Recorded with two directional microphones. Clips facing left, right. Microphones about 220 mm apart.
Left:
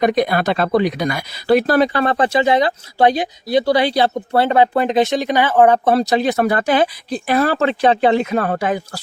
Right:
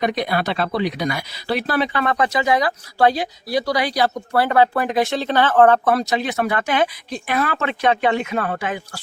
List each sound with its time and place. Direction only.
0.0 s speech: 50° left (ahead or behind); by 5.9 s 15° left (ahead or behind)
5.9 s speech: 35° left (ahead or behind)